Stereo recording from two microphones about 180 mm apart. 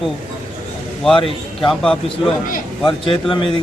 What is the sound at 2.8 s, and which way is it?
Speech, 30° left (ahead or behind).